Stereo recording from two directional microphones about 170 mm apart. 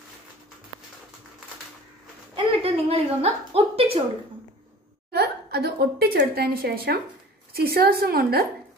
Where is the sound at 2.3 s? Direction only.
35° right (ahead or behind).